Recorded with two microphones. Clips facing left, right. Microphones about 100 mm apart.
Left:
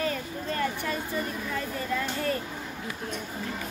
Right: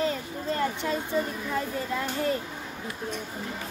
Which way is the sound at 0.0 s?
20° right (ahead or behind).